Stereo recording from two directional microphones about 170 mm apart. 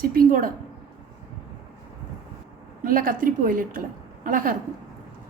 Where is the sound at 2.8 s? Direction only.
55° right (ahead or behind).